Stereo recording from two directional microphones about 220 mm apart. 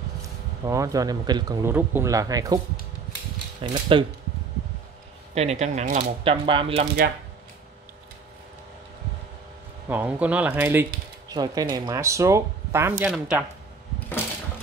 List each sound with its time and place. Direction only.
0.7 s speech: 15° right (ahead or behind)
3.6 s speech: 20° right (ahead or behind)
5.3 s speech: 30° right (ahead or behind)
9.8 s speech: 5° right (ahead or behind)
13.9 s a sound: 10° left (ahead or behind)